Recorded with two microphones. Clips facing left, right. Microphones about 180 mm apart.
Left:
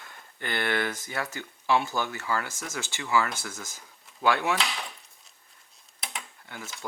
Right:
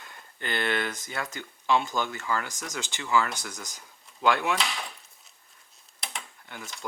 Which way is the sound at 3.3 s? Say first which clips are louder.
Left 1 dB; 15° right (ahead or behind).